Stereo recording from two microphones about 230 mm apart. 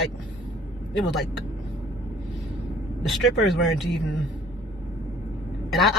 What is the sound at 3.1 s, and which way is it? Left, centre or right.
Speech, centre.